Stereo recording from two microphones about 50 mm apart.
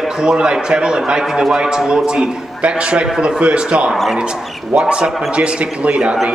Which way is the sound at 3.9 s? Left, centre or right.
Centre.